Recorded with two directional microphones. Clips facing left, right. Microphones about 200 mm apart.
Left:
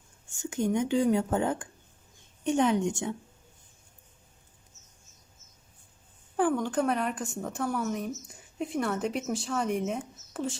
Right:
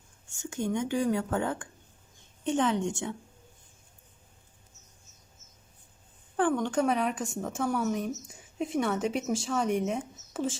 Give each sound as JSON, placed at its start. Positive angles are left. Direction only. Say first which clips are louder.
{"t": 0.3, "sound": "a woman's voice", "louder": "left 3 dB", "side_deg": 15}
{"t": 6.5, "sound": "a woman's voice", "louder": "right 1 dB", "side_deg": 5}